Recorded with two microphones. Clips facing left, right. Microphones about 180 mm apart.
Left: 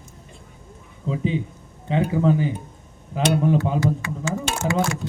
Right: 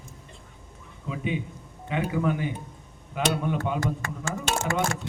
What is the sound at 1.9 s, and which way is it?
Speech, 30° left (ahead or behind).